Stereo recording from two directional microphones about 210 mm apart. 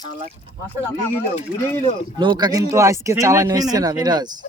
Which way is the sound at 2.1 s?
20° right (ahead or behind).